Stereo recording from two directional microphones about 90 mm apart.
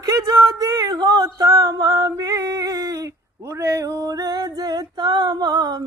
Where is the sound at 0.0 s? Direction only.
45° right (ahead or behind).